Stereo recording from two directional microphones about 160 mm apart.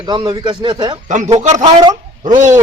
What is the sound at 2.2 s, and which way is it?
Speech, 50° right (ahead or behind).